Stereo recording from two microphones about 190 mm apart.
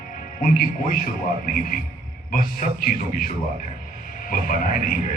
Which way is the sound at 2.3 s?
50° left (ahead or behind).